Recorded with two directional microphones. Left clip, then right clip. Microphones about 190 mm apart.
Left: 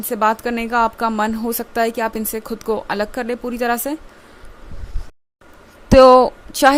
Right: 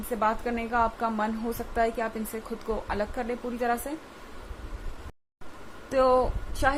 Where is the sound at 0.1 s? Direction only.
60° left (ahead or behind).